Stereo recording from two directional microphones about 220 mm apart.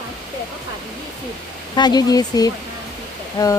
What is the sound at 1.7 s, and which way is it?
Speech, 20° left (ahead or behind).